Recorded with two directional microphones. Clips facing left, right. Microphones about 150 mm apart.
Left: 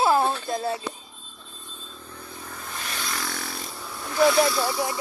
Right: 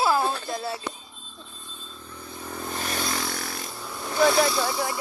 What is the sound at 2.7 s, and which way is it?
Motorcycle, 40° right (ahead or behind).